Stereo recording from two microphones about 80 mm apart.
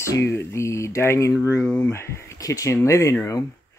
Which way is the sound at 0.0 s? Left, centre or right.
Left.